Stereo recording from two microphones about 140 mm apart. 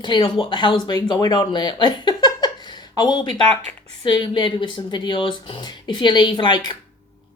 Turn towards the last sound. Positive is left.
turn(degrees=35)  # may be behind; listen again after turning